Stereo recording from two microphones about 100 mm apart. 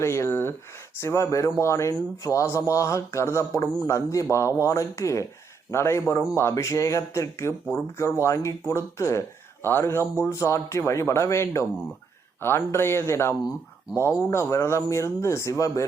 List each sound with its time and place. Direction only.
0.0 s a man's voice: 30° left (ahead or behind)